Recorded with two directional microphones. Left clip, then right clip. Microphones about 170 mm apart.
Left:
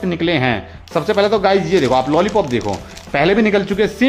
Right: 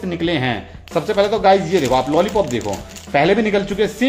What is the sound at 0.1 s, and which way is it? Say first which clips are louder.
Speech: left 3 dB; 35° left (ahead or behind).